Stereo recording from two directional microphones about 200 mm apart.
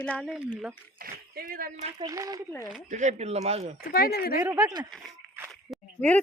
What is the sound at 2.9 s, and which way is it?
Speech, 35° right (ahead or behind).